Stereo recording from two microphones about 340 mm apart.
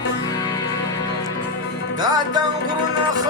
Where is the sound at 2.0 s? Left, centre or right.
Centre.